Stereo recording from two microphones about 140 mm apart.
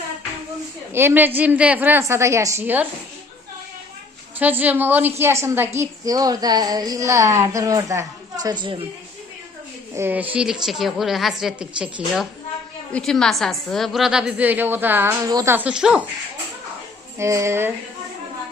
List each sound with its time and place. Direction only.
0.9 s a woman's voice: 15° right (ahead or behind)
4.4 s a woman's voice: 10° right (ahead or behind); by 8.8 s 35° right (ahead or behind)
9.9 s a woman's voice: 15° right (ahead or behind)
15.3 s a woman's voice: 25° right (ahead or behind)
15.5 s a woman's voice: 5° right (ahead or behind)
17.2 s a woman's voice: 20° right (ahead or behind)